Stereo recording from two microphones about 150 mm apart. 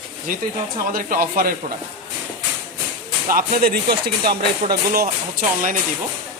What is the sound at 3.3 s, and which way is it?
Speech, 75° right (ahead or behind).